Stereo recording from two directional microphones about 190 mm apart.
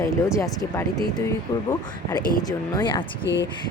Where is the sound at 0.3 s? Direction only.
15° left (ahead or behind).